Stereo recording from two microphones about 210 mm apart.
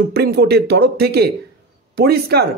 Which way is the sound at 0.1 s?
50° right (ahead or behind).